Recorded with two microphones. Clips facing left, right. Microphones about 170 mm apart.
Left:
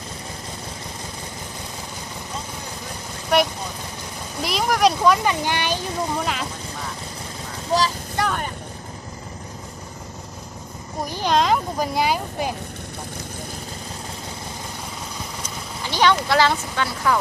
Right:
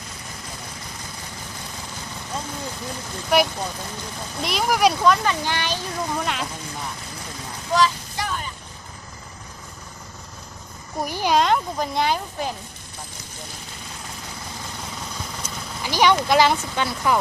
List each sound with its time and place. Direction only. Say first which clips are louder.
3.3 s speech: even; 5° right (ahead or behind)
5.0 s speech: left 1 dB; 10° left (ahead or behind)
6.2 s speech: left 1 dB; centre (ahead or behind)
7.7 s vehicle: right 1 dB; 35° left (ahead or behind)
8.1 s vehicle: left 5 dB; 60° left (ahead or behind)
11.0 s speech: even; 10° right (ahead or behind); by 12.5 s 5° left (ahead or behind)
15.8 s speech: right 1 dB; 10° right (ahead or behind)